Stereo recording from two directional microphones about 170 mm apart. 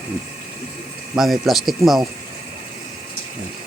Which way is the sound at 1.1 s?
Centre (ahead or behind).